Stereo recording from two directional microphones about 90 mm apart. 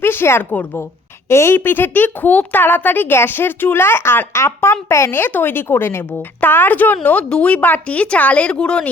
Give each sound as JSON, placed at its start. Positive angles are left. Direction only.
{"t": 0.0, "sound": "a woman's voice", "side_deg": 25}